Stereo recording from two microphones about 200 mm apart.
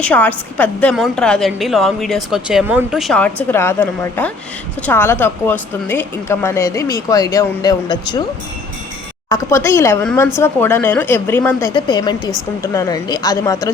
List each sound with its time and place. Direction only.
0.0 s a woman's voice: 5° left (ahead or behind)
9.3 s a woman's voice: 15° left (ahead or behind)
11.7 s a woman's voice: 20° left (ahead or behind)